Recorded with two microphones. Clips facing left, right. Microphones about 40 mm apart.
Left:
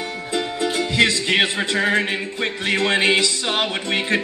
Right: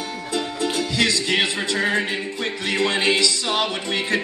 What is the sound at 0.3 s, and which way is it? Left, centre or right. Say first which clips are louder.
Music: left 1 dB; left.